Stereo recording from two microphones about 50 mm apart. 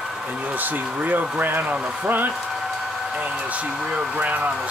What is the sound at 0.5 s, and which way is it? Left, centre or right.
Speech, right.